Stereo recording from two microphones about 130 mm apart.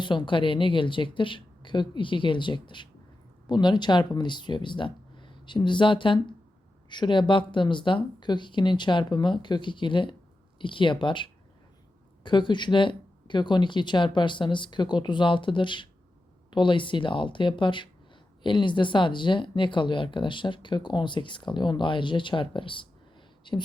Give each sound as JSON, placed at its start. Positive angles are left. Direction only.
{"t": 0.0, "sound": "speech", "side_deg": 35}